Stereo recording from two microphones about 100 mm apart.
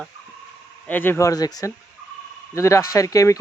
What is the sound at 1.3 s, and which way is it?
Speech, 40° left (ahead or behind).